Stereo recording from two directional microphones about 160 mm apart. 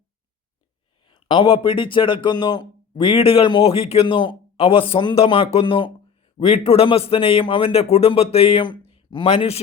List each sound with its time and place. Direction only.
1.0 s a man's voice: 30° left (ahead or behind)